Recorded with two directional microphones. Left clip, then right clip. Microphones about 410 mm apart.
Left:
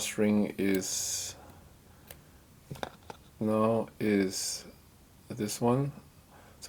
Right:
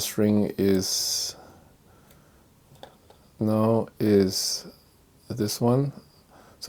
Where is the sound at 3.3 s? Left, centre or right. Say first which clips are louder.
Right 4 dB; right.